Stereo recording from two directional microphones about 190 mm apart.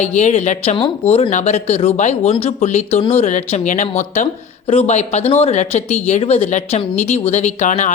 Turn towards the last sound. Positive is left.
turn(degrees=40)  # may be behind; listen again after turning